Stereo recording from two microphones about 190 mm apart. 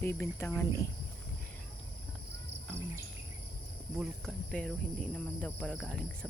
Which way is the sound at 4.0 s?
5° left (ahead or behind).